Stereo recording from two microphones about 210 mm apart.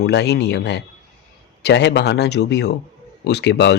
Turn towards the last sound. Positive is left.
turn(degrees=55)  # may be behind; listen again after turning